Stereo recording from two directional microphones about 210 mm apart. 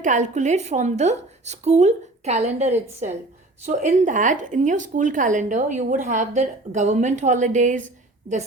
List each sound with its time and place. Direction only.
0.0 s speech: 35° right (ahead or behind)